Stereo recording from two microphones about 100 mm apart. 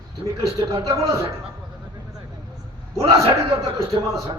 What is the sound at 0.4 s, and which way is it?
Speech, 30° right (ahead or behind).